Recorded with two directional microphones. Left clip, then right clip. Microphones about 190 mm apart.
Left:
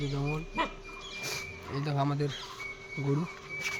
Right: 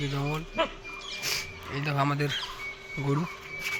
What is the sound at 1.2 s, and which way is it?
Speech, 15° left (ahead or behind).